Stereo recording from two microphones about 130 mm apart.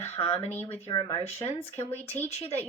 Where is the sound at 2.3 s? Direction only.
55° left (ahead or behind).